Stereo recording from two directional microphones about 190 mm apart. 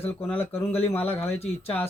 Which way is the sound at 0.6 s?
30° left (ahead or behind).